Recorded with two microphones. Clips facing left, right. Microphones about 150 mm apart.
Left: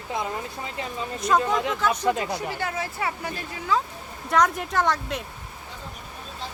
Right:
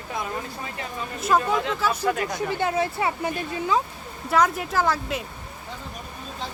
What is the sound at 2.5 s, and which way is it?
Speech, 25° right (ahead or behind).